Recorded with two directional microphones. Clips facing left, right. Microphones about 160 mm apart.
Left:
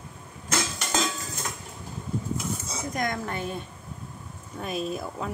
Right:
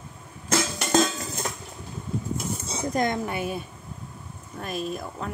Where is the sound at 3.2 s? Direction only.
10° right (ahead or behind).